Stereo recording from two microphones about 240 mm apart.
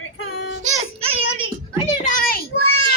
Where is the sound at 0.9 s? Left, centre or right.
Right.